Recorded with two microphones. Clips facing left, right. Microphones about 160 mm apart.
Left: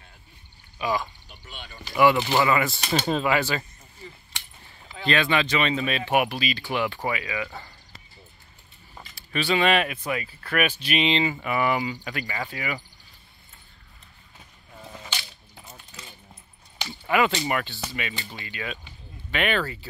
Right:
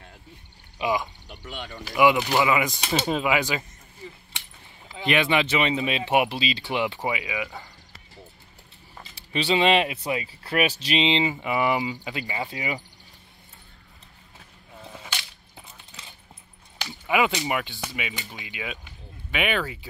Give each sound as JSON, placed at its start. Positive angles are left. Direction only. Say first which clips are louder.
{"t": 0.7, "sound": "speech", "louder": "right 1 dB", "side_deg": -20}
{"t": 1.3, "sound": "speech", "louder": "right 7 dB", "side_deg": -70}
{"t": 1.9, "sound": "speech", "louder": "even", "side_deg": -10}
{"t": 4.9, "sound": "speech", "louder": "right 1 dB", "side_deg": -15}
{"t": 9.3, "sound": "speech", "louder": "right 1 dB", "side_deg": -25}
{"t": 17.1, "sound": "speech", "louder": "left 1 dB", "side_deg": -10}